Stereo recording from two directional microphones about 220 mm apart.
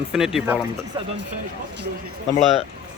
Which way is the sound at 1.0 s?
25° right (ahead or behind).